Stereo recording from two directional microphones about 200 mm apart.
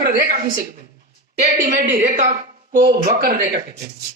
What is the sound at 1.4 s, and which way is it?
Speech, 40° right (ahead or behind).